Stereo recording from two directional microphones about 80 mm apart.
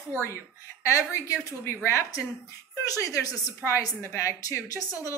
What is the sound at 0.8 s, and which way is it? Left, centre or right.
A woman's voice, left.